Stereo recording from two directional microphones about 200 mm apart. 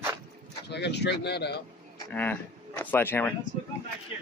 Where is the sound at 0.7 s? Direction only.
60° left (ahead or behind).